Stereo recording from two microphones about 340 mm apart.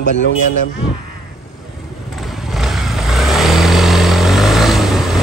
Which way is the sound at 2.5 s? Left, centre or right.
Centre.